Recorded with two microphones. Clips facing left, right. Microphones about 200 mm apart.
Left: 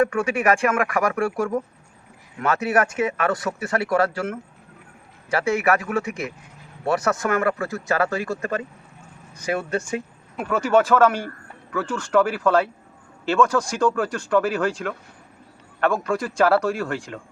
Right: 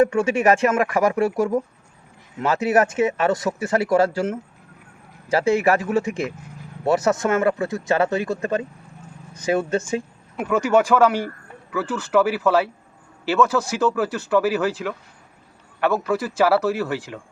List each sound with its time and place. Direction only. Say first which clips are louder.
0.0 s speech: right 3 dB; 25° right (ahead or behind)
10.3 s speech: right 1 dB; 10° right (ahead or behind)